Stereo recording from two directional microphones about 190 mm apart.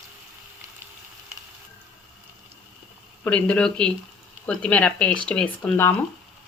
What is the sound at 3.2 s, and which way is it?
Speech, 5° left (ahead or behind).